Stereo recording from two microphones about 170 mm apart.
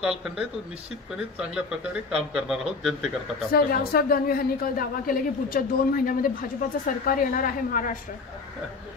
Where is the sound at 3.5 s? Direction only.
60° left (ahead or behind).